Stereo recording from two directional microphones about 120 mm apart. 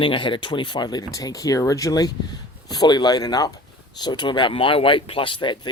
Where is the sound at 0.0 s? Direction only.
45° left (ahead or behind).